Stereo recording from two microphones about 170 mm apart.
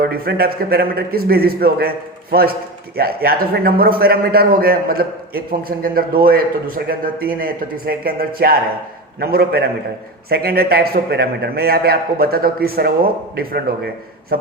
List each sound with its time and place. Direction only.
0.0 s a man's voice: 65° right (ahead or behind)